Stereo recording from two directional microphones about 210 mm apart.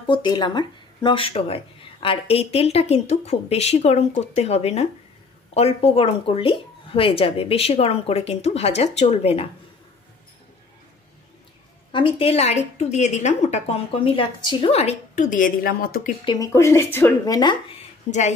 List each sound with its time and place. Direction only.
0.0 s speech: 20° left (ahead or behind)
11.9 s a woman's voice: 25° left (ahead or behind); by 16.1 s 45° left (ahead or behind)
16.3 s speech: 15° left (ahead or behind); by 18.3 s 30° left (ahead or behind)